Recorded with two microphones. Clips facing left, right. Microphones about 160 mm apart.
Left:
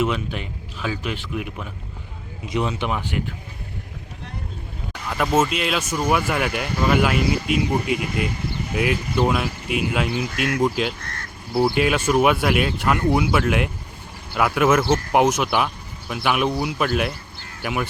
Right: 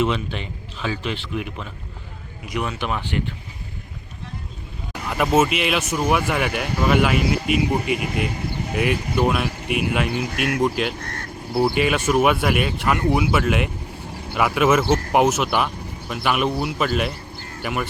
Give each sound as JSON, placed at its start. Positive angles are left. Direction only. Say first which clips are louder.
{"t": 0.0, "sound": "speech", "louder": "right 1 dB", "side_deg": 5}
{"t": 2.5, "sound": "speech", "louder": "left 2 dB", "side_deg": 20}
{"t": 5.0, "sound": "speech", "louder": "right 2 dB", "side_deg": -5}
{"t": 9.6, "sound": "speech", "louder": "right 1 dB", "side_deg": -60}
{"t": 11.0, "sound": "a sound", "louder": "right 3 dB", "side_deg": -35}
{"t": 11.5, "sound": "speech", "louder": "even", "side_deg": -5}